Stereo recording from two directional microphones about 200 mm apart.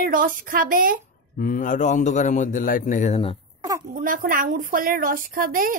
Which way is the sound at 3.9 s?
40° right (ahead or behind).